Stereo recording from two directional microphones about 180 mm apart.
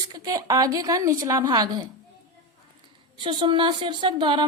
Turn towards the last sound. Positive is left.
turn(degrees=-25)  # may be behind; listen again after turning